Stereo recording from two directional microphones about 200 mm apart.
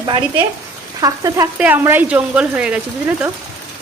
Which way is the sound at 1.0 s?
15° right (ahead or behind).